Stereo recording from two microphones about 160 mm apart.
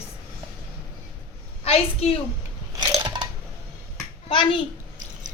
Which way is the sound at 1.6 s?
40° left (ahead or behind).